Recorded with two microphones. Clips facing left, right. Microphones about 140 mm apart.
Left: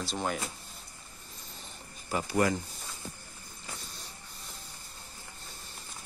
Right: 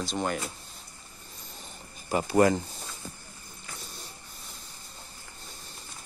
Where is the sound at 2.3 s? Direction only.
35° right (ahead or behind).